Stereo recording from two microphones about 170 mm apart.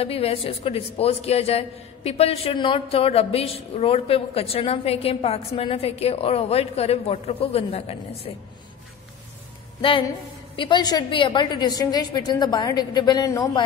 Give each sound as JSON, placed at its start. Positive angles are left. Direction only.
{"t": 0.0, "sound": "a woman's voice", "side_deg": 35}
{"t": 9.8, "sound": "a woman's voice", "side_deg": 30}